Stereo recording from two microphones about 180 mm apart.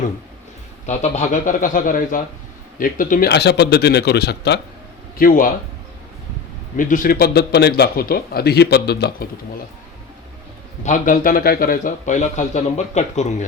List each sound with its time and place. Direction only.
0.9 s a man's voice: 40° left (ahead or behind); by 4.6 s 65° left (ahead or behind)
5.2 s a man's voice: 50° left (ahead or behind)
6.7 s a man's voice: 50° left (ahead or behind); by 9.2 s 65° left (ahead or behind)
10.8 s a man's voice: 45° left (ahead or behind)